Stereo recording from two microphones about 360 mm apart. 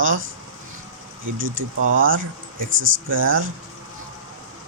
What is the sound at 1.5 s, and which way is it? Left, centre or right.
Speech, right.